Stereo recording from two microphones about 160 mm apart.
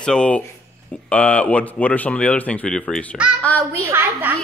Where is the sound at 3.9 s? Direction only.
15° right (ahead or behind).